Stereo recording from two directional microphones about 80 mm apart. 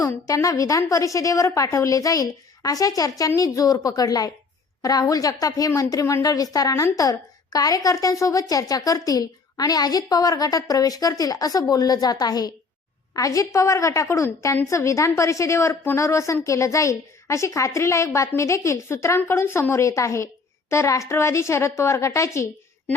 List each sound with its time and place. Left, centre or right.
0.0 s a woman's voice: left